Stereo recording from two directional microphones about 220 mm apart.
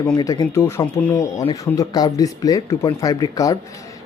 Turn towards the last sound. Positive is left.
turn(degrees=15)  # may be behind; listen again after turning